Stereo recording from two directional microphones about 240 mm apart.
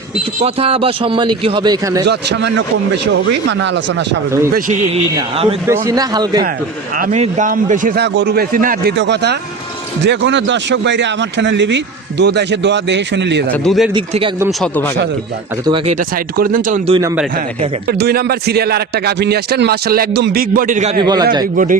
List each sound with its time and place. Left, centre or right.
0.3 s a man's voice: right
2.0 s speech: right
5.1 s a man's voice: right
5.6 s a man's voice: centre
7.0 s a man's voice: right
13.5 s a man's voice: centre
13.9 s a man's voice: right
15.6 s a man's voice: centre
16.0 s a man's voice: right
17.8 s a man's voice: right
21.0 s a man's voice: centre
21.5 s a man's voice: right